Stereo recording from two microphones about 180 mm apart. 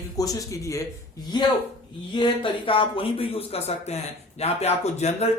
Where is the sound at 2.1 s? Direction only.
25° left (ahead or behind).